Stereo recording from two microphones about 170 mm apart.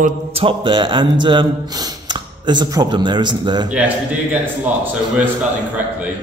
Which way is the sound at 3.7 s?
10° right (ahead or behind).